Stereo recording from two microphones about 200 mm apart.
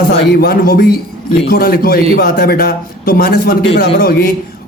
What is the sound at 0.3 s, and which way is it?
A man's voice, 50° left (ahead or behind).